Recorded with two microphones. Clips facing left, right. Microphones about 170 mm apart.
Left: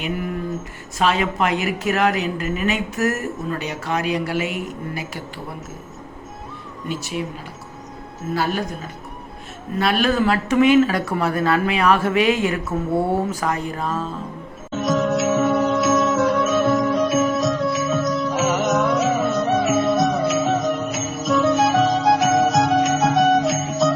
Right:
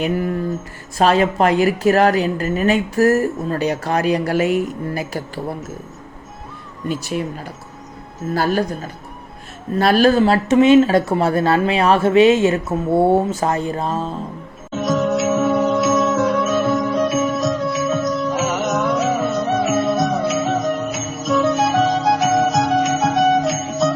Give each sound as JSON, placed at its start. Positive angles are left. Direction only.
{"t": 0.9, "sound": "a woman's voice", "side_deg": -40}
{"t": 6.8, "sound": "speech", "side_deg": -45}
{"t": 8.3, "sound": "a woman's voice", "side_deg": -40}
{"t": 14.7, "sound": "music", "side_deg": 0}